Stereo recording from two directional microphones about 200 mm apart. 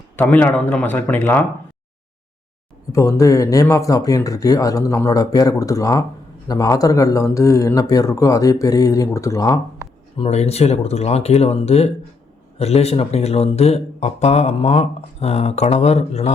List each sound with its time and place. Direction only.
0.2 s speech: 10° left (ahead or behind)
2.9 s speech: 15° left (ahead or behind)
10.2 s speech: 30° left (ahead or behind)